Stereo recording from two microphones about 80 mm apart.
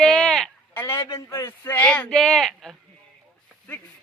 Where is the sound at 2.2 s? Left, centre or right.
Centre.